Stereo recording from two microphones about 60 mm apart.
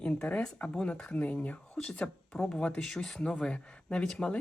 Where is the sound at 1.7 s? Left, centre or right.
Centre.